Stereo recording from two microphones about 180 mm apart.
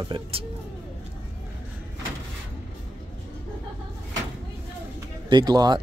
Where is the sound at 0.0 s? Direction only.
30° right (ahead or behind).